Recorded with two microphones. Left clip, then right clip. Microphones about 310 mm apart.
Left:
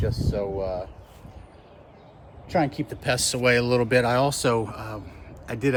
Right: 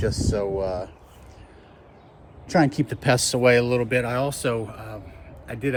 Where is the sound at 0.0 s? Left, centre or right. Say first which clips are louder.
Right 3 dB; right.